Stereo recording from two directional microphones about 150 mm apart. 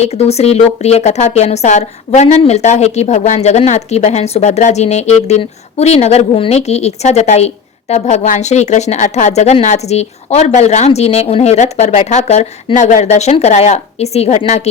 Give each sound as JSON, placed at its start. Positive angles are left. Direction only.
{"t": 0.0, "sound": "a woman's voice", "side_deg": 45}